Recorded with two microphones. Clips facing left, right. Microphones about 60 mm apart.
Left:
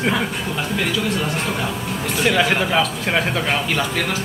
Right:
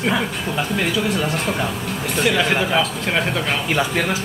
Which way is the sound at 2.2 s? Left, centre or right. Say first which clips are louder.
Left 1 dB; centre.